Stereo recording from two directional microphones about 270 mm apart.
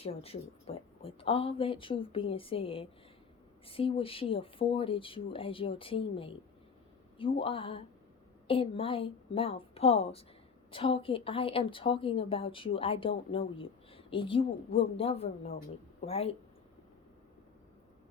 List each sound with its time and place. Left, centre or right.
0.0 s a woman's voice: left